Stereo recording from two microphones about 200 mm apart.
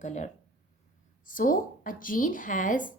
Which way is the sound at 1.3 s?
45° left (ahead or behind).